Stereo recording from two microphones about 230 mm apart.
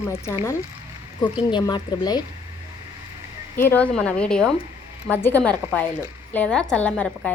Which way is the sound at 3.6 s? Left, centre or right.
Centre.